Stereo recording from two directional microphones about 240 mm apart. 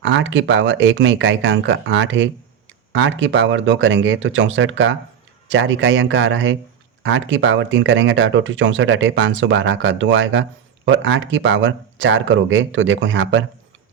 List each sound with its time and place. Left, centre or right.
0.0 s speech: right